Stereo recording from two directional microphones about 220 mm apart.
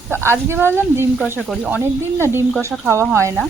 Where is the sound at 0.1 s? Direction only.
10° right (ahead or behind).